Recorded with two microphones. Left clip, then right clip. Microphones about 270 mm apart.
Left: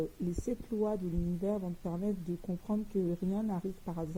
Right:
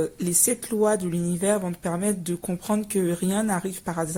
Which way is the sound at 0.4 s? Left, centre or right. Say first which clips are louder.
Right 12 dB; right.